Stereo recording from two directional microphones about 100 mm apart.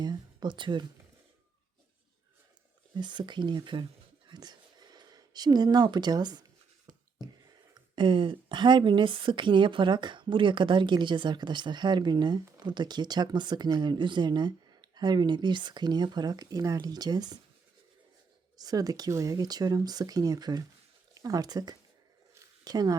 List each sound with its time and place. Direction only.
0.0 s speech: 45° right (ahead or behind)
2.9 s speech: 50° right (ahead or behind)
4.3 s a sound: 45° right (ahead or behind)
7.7 s speech: 55° right (ahead or behind)
18.5 s speech: 40° right (ahead or behind)